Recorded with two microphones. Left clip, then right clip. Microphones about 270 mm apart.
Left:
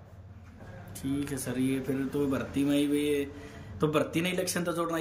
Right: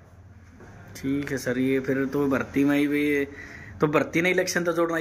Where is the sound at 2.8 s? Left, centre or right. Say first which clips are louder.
Right 4 dB; right.